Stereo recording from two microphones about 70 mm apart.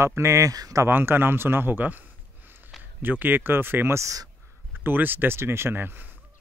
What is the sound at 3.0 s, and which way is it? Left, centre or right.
Speech, right.